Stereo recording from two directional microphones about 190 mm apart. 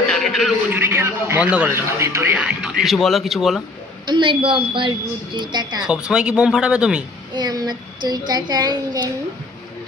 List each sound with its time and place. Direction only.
0.1 s a sound: centre (ahead or behind)
0.7 s a man's voice: 10° right (ahead or behind)
4.0 s a woman's voice: 25° right (ahead or behind)
5.9 s speech: 5° right (ahead or behind)
7.3 s a woman's voice: 20° right (ahead or behind)